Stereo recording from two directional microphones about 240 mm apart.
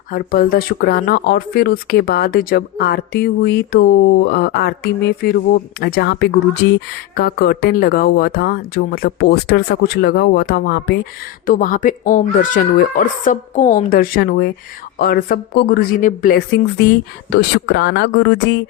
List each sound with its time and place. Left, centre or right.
0.1 s speech: left
17.3 s speech: left